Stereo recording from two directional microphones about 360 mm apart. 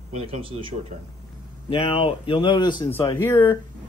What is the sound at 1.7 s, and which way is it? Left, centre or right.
Speech, centre.